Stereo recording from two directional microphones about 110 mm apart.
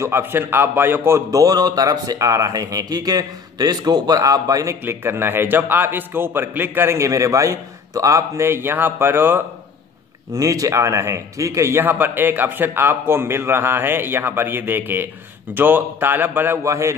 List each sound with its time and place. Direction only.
0.0 s a man's voice: 20° right (ahead or behind)
4.8 s a man's voice: 20° right (ahead or behind)
10.3 s a man's voice: 30° right (ahead or behind)